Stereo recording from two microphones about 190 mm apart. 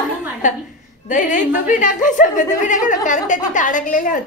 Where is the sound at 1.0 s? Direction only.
40° left (ahead or behind).